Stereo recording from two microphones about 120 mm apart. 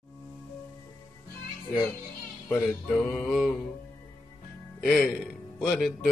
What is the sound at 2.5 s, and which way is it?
Music, 15° left (ahead or behind).